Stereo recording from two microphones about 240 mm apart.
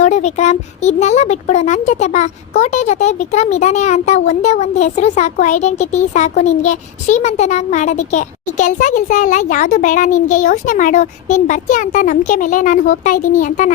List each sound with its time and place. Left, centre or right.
0.0 s speech: left